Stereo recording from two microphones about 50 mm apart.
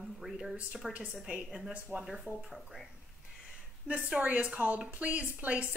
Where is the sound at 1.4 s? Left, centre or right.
Centre.